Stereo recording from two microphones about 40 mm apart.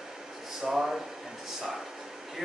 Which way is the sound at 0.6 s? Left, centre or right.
Centre.